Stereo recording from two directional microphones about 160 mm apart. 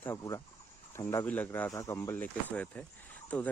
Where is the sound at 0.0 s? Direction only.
20° left (ahead or behind).